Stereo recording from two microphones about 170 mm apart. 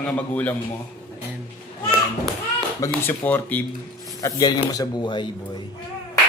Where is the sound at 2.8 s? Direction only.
10° left (ahead or behind).